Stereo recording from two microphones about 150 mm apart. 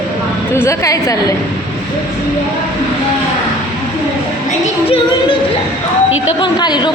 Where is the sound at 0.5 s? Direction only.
20° left (ahead or behind).